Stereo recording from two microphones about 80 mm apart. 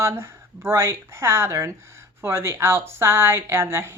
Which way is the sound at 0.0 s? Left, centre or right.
Right.